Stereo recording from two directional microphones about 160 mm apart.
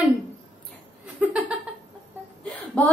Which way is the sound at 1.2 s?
10° right (ahead or behind).